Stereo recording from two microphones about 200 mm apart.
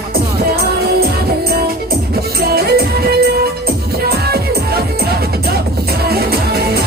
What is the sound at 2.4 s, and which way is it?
Music, 50° right (ahead or behind).